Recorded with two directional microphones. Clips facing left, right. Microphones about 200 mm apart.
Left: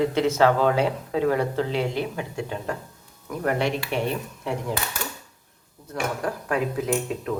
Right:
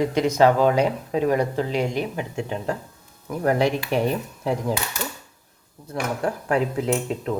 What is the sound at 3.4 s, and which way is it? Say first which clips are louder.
Speech: right 4 dB; 35° right (ahead or behind).